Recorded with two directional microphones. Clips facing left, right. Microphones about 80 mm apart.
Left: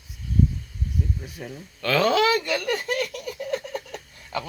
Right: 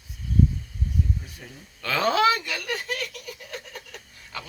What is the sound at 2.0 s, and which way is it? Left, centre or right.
Speech, right.